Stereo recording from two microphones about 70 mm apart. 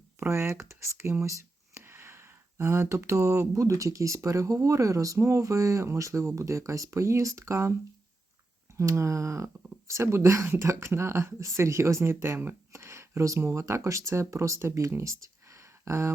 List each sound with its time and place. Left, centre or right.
0.2 s speech: right
8.7 s speech: right